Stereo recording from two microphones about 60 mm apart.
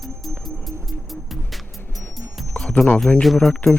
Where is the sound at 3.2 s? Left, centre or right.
Centre.